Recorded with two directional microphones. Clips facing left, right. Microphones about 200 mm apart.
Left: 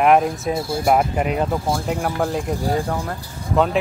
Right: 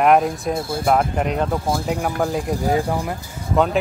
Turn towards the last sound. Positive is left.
turn(degrees=0)  # may be behind; listen again after turning